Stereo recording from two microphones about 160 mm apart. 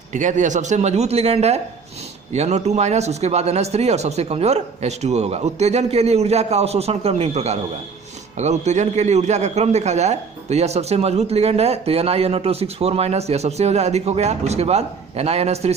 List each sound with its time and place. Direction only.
0.1 s a man's voice: 50° right (ahead or behind)